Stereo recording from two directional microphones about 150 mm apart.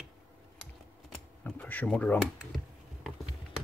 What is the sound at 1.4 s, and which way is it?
Computer keyboard, 10° left (ahead or behind).